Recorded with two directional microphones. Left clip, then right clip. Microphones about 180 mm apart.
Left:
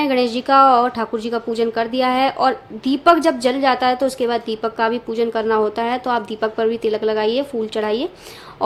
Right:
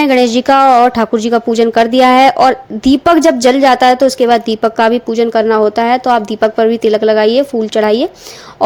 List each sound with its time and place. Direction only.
0.0 s a woman's voice: 40° right (ahead or behind)